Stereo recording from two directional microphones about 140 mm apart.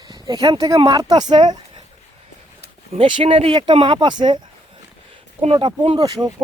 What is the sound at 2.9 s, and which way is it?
Speech, 40° right (ahead or behind).